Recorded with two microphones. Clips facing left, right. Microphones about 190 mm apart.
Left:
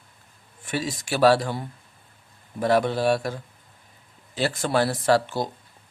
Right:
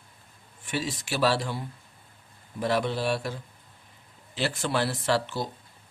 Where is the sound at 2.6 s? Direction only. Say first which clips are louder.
Left 5 dB; 50° left (ahead or behind).